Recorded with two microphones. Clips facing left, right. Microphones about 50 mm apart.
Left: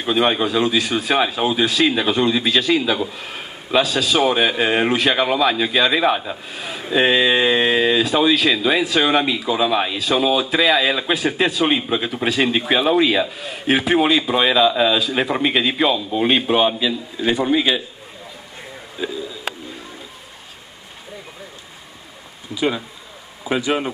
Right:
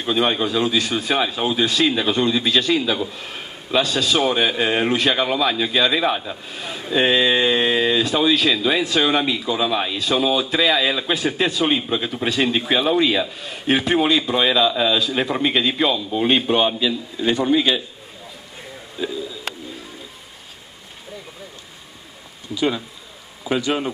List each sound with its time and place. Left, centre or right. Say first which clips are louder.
0.0 s a man's voice: left 2 dB; centre
18.9 s a sound: even; centre
22.5 s speech: even; centre